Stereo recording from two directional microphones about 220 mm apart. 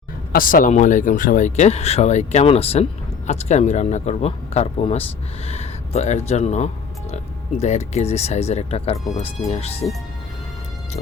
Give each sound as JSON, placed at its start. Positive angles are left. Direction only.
{"t": 0.3, "sound": "speech", "side_deg": 40}